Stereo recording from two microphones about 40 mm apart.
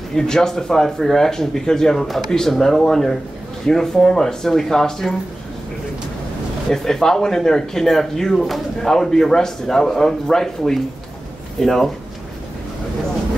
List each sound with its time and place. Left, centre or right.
0.1 s speech: centre
6.7 s speech: centre